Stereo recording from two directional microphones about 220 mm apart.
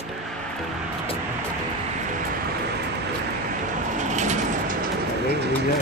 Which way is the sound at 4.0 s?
35° right (ahead or behind).